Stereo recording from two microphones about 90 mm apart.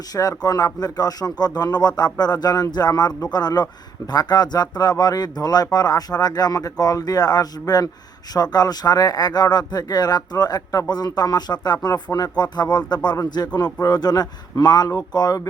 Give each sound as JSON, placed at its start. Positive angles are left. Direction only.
{"t": 0.1, "sound": "speech", "side_deg": 40}